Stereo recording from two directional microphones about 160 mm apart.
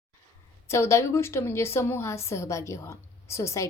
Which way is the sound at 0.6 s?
15° left (ahead or behind).